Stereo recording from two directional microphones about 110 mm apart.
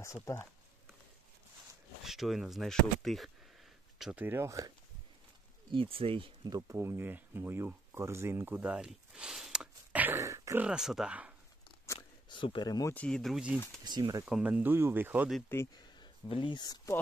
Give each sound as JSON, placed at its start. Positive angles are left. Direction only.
{"t": 0.0, "sound": "speech", "side_deg": 25}
{"t": 2.0, "sound": "speech", "side_deg": -5}
{"t": 4.0, "sound": "speech", "side_deg": -15}
{"t": 5.7, "sound": "speech", "side_deg": -55}
{"t": 6.4, "sound": "speech", "side_deg": -35}
{"t": 6.8, "sound": "speech", "side_deg": -20}
{"t": 10.1, "sound": "speech", "side_deg": -25}
{"t": 10.6, "sound": "speech", "side_deg": -5}
{"t": 12.3, "sound": "speech", "side_deg": 50}
{"t": 12.9, "sound": "speech", "side_deg": 10}
{"t": 13.8, "sound": "speech", "side_deg": -40}
{"t": 14.2, "sound": "speech", "side_deg": -10}
{"t": 15.7, "sound": "speech", "side_deg": 40}